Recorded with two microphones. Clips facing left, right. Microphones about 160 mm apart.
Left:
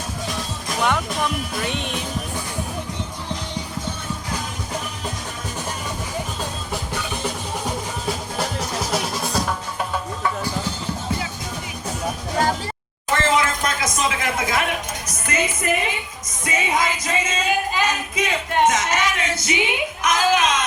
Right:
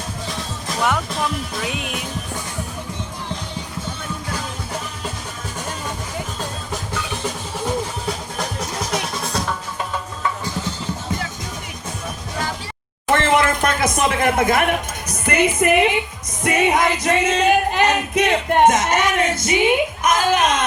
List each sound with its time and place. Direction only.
0.8 s music: centre (ahead or behind)
8.9 s music: centre (ahead or behind)
13.1 s a sound: 60° right (ahead or behind)
15.3 s music: 65° right (ahead or behind)
16.4 s female singing: 60° right (ahead or behind)
20.0 s a sound: 50° right (ahead or behind)